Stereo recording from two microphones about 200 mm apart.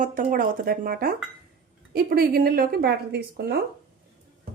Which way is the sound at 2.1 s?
50° right (ahead or behind).